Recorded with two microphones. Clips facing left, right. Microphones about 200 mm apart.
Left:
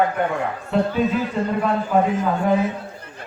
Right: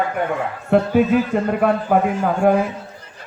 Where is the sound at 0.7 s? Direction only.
60° right (ahead or behind).